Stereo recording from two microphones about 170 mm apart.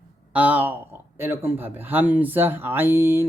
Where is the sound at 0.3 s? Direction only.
10° right (ahead or behind).